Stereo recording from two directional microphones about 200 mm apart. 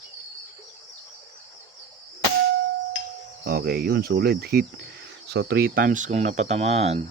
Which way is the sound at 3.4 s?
50° right (ahead or behind).